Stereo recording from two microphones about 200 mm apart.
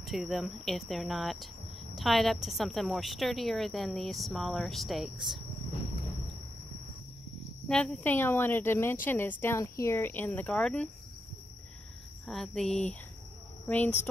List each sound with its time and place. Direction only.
0.0 s a woman's voice: centre (ahead or behind)
7.6 s speech: 5° left (ahead or behind)
12.3 s a woman's voice: centre (ahead or behind)